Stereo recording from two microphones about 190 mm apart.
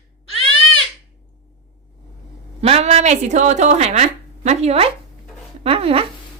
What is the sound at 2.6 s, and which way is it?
Speech, 35° right (ahead or behind).